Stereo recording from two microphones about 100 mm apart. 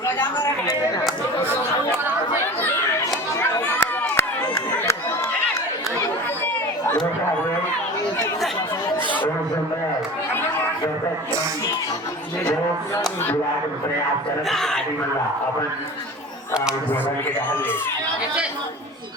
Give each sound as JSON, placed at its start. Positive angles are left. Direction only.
{"t": 0.7, "sound": "chatter", "side_deg": 40}
{"t": 3.3, "sound": "chatter", "side_deg": 25}
{"t": 4.1, "sound": "run", "side_deg": 25}
{"t": 14.4, "sound": "speech", "side_deg": 5}